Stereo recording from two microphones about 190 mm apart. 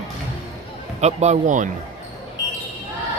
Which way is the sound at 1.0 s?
35° right (ahead or behind).